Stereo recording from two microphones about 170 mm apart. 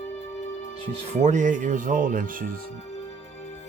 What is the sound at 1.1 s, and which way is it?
Speech, 45° right (ahead or behind).